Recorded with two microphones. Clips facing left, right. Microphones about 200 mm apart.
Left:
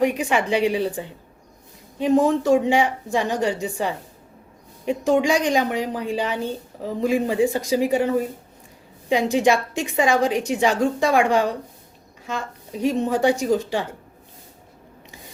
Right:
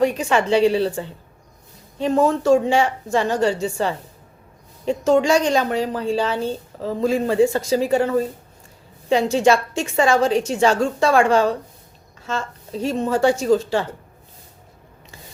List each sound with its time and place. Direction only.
0.0 s a woman's voice: 15° left (ahead or behind)